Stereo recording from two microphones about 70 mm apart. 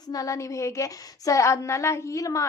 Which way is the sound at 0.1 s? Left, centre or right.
Left.